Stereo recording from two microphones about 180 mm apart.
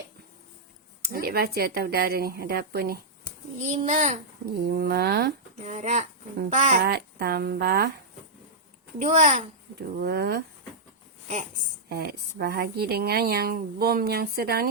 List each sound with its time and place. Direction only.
1.1 s speech: 55° right (ahead or behind)
3.6 s a child's voice: 40° right (ahead or behind)
4.7 s speech: 60° right (ahead or behind)
5.6 s a child's voice: 40° right (ahead or behind)
6.8 s speech: 60° right (ahead or behind)
9.0 s a child's voice: 40° right (ahead or behind)
10.0 s speech: 60° right (ahead or behind)
11.9 s speech: 60° right (ahead or behind)